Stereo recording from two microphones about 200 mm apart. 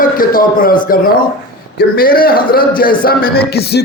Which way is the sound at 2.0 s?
45° left (ahead or behind).